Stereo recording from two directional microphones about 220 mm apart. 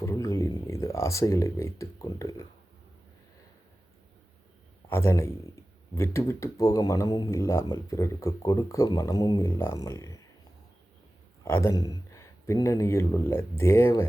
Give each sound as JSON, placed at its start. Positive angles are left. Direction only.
{"t": 0.0, "sound": "a sound", "side_deg": 15}
{"t": 4.9, "sound": "speech", "side_deg": 10}
{"t": 11.4, "sound": "speech", "side_deg": 10}